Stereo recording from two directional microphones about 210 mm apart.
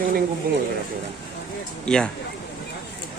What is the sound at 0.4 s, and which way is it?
Speech, 45° right (ahead or behind).